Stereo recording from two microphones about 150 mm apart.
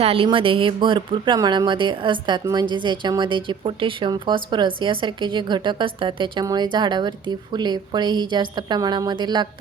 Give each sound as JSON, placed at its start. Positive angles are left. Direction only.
{"t": 0.0, "sound": "speech", "side_deg": -40}